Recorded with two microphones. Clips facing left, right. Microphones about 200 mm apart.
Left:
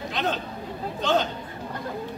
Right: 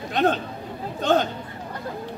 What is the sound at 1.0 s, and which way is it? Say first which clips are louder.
Chatter: right 3 dB; 50° right (ahead or behind).